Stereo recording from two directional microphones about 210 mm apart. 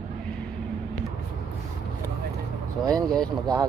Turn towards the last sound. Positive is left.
turn(degrees=-20)  # may be behind; listen again after turning